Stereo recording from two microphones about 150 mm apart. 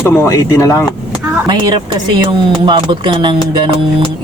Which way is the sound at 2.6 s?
30° right (ahead or behind).